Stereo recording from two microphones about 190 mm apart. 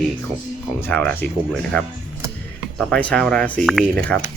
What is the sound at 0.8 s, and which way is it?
Speech, 5° left (ahead or behind).